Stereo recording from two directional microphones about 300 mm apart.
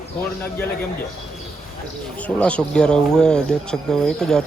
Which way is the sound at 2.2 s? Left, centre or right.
Centre.